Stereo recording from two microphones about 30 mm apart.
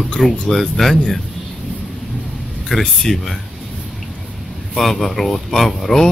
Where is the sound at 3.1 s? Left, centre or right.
Centre.